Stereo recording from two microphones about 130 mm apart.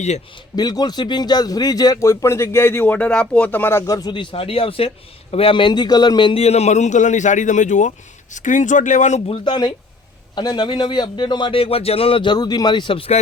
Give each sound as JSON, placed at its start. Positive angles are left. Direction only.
{"t": 0.5, "sound": "a man's voice", "side_deg": 30}
{"t": 4.1, "sound": "a man's voice", "side_deg": 40}
{"t": 9.2, "sound": "speech", "side_deg": 40}